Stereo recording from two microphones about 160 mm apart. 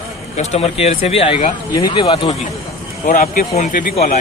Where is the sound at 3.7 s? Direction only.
60° left (ahead or behind).